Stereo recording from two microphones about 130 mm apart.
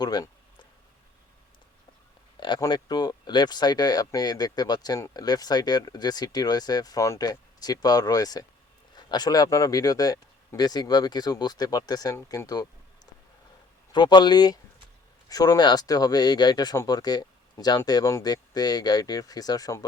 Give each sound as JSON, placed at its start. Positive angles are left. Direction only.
{"t": 0.0, "sound": "speech", "side_deg": 30}
{"t": 2.4, "sound": "speech", "side_deg": 35}
{"t": 13.9, "sound": "speech", "side_deg": 35}